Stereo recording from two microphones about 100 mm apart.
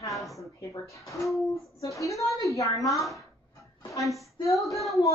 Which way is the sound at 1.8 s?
30° left (ahead or behind).